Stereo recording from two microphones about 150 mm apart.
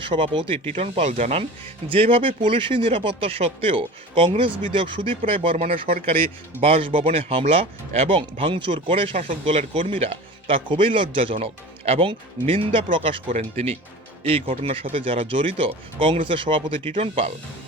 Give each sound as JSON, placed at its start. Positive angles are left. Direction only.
{"t": 0.0, "sound": "speech", "side_deg": -35}
{"t": 9.2, "sound": "speech", "side_deg": -50}